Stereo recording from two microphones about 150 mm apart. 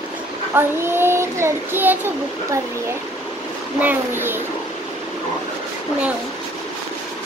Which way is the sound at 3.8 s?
15° right (ahead or behind).